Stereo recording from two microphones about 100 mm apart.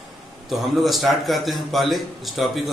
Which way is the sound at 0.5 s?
Centre (ahead or behind).